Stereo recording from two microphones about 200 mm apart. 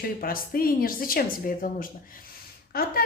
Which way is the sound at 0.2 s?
45° left (ahead or behind).